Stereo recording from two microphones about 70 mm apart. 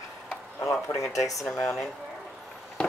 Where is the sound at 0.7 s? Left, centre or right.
Left.